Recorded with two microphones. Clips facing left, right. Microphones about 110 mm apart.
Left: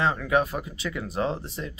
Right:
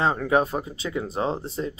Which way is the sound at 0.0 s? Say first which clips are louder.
Right 2 dB; 35° right (ahead or behind).